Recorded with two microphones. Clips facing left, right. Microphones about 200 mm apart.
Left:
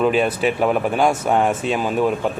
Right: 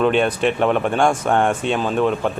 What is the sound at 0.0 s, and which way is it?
Speech, 5° left (ahead or behind).